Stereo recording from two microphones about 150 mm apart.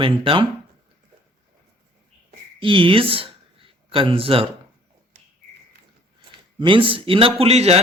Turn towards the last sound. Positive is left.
turn(degrees=-45)  # may be behind; listen again after turning